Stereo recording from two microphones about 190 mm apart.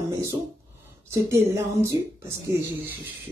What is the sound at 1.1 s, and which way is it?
Speech, 15° right (ahead or behind).